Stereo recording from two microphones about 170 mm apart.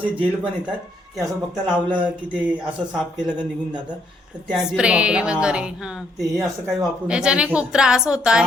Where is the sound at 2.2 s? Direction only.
10° right (ahead or behind).